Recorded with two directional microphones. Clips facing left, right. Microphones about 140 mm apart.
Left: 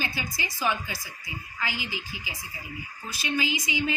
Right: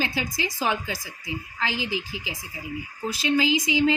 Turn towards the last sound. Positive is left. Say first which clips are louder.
# right 7 dB
turn(degrees=-90)